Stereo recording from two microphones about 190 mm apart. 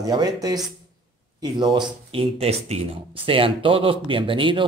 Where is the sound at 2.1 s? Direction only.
30° right (ahead or behind).